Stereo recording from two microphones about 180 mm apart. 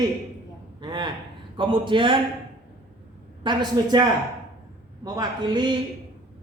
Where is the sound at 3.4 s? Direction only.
25° right (ahead or behind).